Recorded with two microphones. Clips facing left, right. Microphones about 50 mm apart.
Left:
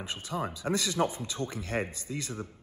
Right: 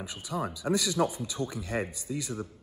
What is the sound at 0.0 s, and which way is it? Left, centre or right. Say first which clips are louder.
A man's voice: even; left.